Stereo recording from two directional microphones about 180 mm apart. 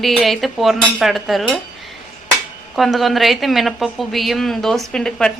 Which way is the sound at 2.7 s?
Centre (ahead or behind).